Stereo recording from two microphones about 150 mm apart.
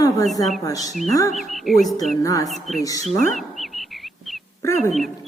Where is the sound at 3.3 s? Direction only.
Centre (ahead or behind).